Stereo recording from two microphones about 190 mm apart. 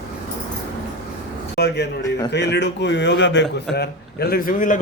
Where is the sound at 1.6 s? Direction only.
60° left (ahead or behind).